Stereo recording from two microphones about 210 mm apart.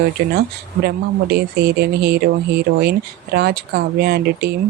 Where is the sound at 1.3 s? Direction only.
50° right (ahead or behind).